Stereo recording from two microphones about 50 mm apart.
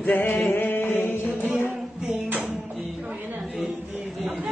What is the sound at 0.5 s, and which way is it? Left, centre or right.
Chant, left.